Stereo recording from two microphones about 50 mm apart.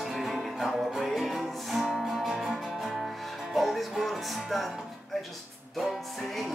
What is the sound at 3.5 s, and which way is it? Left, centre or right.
Music, centre.